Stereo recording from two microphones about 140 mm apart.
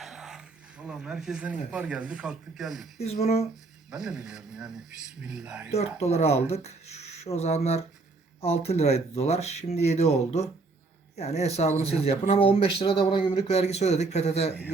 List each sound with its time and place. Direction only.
0.0 s a sound: 5° right (ahead or behind)
0.9 s speech: 5° right (ahead or behind)
3.0 s speech: 50° left (ahead or behind)
3.9 s speech: 5° right (ahead or behind)
5.7 s speech: 50° left (ahead or behind)